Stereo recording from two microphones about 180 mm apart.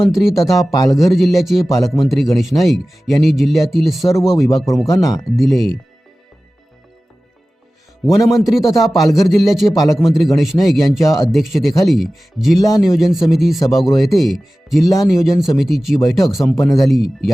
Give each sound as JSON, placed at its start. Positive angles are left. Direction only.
{"t": 0.1, "sound": "speech", "side_deg": 0}
{"t": 0.5, "sound": "speech", "side_deg": 20}
{"t": 0.9, "sound": "speech", "side_deg": 0}
{"t": 4.9, "sound": "speech", "side_deg": 20}
{"t": 5.4, "sound": "speech", "side_deg": 0}
{"t": 8.2, "sound": "speech", "side_deg": 0}